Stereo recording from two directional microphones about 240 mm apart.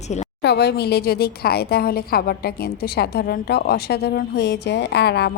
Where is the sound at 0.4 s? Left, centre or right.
Left.